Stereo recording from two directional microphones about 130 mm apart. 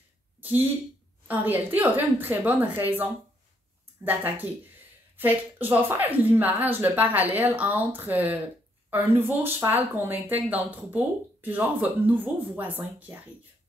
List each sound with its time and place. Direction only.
0.4 s speech: 15° right (ahead or behind)